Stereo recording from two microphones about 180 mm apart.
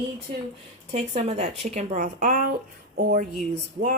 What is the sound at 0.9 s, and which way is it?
A woman's voice, 35° right (ahead or behind).